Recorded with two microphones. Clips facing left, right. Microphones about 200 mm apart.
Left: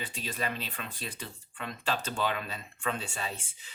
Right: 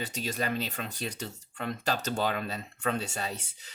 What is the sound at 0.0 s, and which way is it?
Speech, 45° right (ahead or behind).